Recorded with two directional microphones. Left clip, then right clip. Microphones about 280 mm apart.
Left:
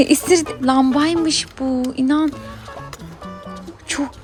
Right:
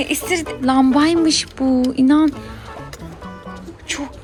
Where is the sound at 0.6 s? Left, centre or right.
Centre.